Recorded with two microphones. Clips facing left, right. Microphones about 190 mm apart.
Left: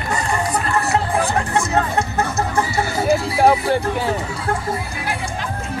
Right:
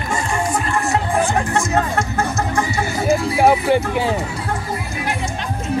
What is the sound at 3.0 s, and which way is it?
Music, centre (ahead or behind).